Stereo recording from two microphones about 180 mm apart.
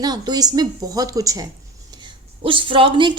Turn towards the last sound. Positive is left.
turn(degrees=-25)  # may be behind; listen again after turning